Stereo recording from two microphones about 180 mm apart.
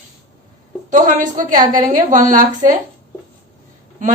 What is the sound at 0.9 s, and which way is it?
A woman's voice, 45° right (ahead or behind).